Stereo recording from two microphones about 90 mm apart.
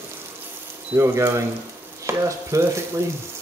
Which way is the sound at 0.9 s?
30° right (ahead or behind).